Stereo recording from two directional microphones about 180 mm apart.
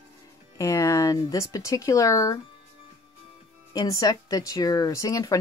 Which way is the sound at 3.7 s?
20° left (ahead or behind).